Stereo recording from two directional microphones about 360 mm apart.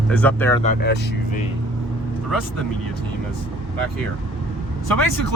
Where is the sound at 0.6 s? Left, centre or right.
Left.